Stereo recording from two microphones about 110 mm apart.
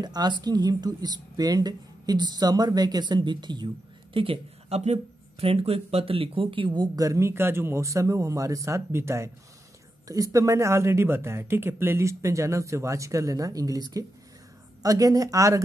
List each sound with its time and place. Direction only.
0.0 s a woman's voice: 40° right (ahead or behind)
7.1 s speech: 25° right (ahead or behind)